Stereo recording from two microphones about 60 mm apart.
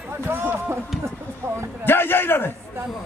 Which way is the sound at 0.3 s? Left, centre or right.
Right.